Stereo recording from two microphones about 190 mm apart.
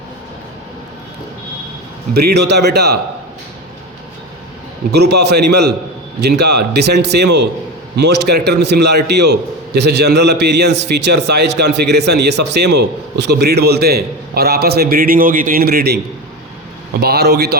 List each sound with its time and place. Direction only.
2.1 s a man's voice: 60° right (ahead or behind)
4.9 s a man's voice: 60° right (ahead or behind)
17.0 s a man's voice: 55° right (ahead or behind)